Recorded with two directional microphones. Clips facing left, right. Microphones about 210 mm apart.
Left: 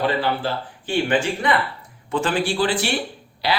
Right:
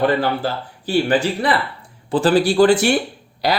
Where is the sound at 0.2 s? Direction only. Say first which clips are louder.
Right 2 dB; 40° right (ahead or behind).